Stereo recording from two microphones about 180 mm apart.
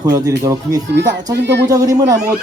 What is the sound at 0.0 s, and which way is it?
Speech, 15° right (ahead or behind).